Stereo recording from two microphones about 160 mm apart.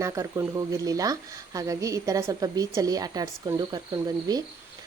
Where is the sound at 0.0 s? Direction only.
20° right (ahead or behind).